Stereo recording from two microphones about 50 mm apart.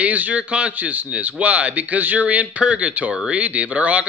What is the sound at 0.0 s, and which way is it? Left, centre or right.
A man's voice, right.